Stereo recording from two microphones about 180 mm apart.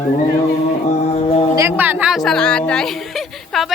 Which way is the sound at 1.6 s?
10° right (ahead or behind).